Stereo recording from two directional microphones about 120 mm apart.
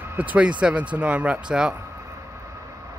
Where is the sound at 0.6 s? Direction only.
10° right (ahead or behind).